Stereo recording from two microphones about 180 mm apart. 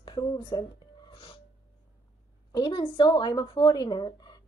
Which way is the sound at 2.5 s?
25° left (ahead or behind).